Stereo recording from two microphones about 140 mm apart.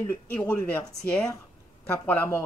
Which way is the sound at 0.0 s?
15° left (ahead or behind).